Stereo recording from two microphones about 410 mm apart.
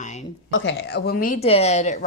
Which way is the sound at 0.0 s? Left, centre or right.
Centre.